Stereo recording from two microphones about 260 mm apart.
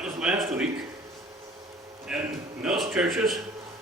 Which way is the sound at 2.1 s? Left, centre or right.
Centre.